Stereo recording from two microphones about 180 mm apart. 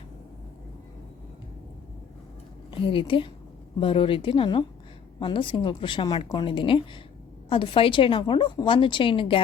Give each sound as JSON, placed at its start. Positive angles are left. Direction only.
{"t": 2.8, "sound": "a woman's voice", "side_deg": 30}